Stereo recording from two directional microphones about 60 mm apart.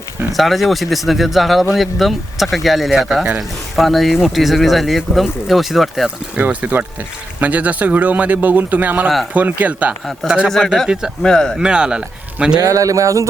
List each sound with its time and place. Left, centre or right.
0.3 s speech: centre
6.3 s speech: right
11.2 s speech: centre
11.5 s speech: centre
12.5 s speech: right